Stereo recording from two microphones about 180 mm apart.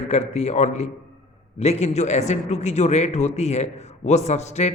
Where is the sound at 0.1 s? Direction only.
40° left (ahead or behind).